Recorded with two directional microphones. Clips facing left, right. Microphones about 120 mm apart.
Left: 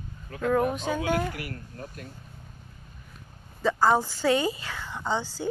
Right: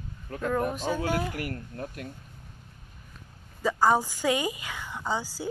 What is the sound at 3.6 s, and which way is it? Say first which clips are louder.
A woman's voice: left 1 dB; 10° right (ahead or behind).